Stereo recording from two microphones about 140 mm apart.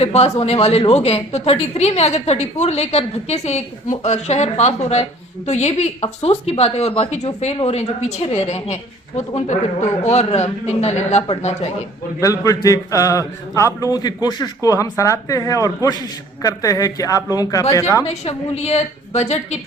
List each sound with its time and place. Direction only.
0.0 s a woman's voice: 45° left (ahead or behind)
12.2 s speech: 25° left (ahead or behind)
18.1 s a woman's voice: 50° left (ahead or behind)